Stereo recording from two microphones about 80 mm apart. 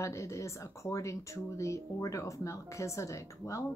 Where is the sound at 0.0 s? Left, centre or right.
Left.